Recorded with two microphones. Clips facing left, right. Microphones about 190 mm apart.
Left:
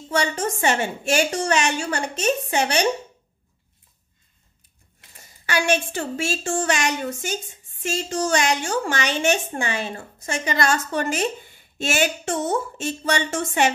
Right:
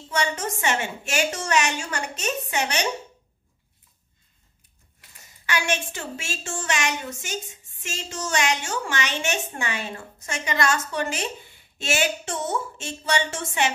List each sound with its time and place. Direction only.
0.1 s a woman's voice: 35° left (ahead or behind)
5.5 s a woman's voice: 35° left (ahead or behind)